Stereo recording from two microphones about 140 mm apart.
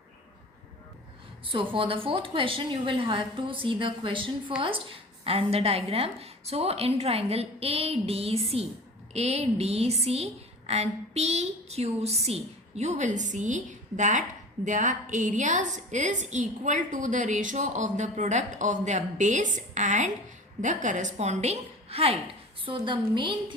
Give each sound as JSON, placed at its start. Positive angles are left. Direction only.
{"t": 1.7, "sound": "a woman's voice", "side_deg": -40}